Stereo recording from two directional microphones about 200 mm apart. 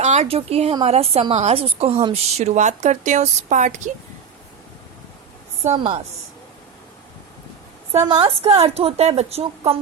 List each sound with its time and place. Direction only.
0.0 s a woman's voice: 35° right (ahead or behind)
5.6 s a woman's voice: 25° right (ahead or behind)
7.9 s a woman's voice: 30° right (ahead or behind)